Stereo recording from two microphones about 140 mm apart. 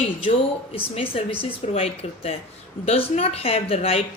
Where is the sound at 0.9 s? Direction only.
40° left (ahead or behind).